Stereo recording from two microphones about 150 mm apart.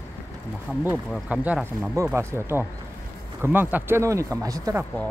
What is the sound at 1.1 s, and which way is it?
Speech, 10° right (ahead or behind).